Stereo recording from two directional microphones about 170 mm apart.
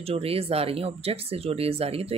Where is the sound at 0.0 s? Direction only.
35° right (ahead or behind).